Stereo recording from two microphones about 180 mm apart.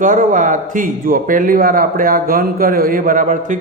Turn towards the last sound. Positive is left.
turn(degrees=-45)  # may be behind; listen again after turning